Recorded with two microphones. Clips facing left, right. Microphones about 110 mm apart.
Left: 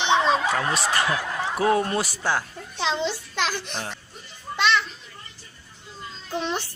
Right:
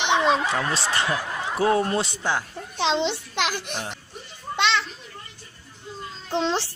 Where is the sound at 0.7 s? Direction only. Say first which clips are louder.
Left 1 dB; 30° right (ahead or behind).